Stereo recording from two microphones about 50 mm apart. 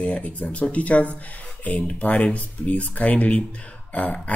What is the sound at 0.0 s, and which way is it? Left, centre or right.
Speech, left.